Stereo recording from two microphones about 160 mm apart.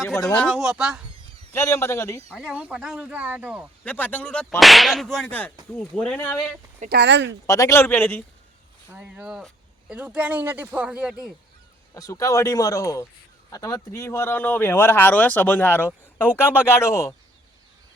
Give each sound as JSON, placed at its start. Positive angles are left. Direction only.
{"t": 0.1, "sound": "speech", "side_deg": 10}
{"t": 1.5, "sound": "speech", "side_deg": 20}
{"t": 2.3, "sound": "speech", "side_deg": -10}
{"t": 3.8, "sound": "speech", "side_deg": 10}
{"t": 6.8, "sound": "speech", "side_deg": -90}
{"t": 7.4, "sound": "speech", "side_deg": 20}
{"t": 8.9, "sound": "speech", "side_deg": -10}
{"t": 11.9, "sound": "speech", "side_deg": 20}